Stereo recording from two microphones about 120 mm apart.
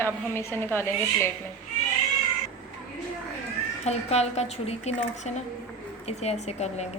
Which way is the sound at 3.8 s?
65° left (ahead or behind).